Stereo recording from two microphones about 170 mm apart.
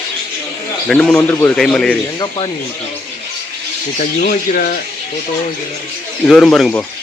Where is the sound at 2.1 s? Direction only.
30° left (ahead or behind).